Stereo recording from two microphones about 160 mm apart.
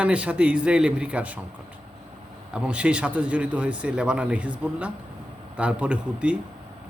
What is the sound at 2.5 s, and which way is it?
Speech, 5° right (ahead or behind).